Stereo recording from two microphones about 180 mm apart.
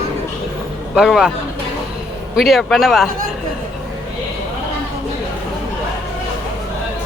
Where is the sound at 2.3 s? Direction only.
Centre (ahead or behind).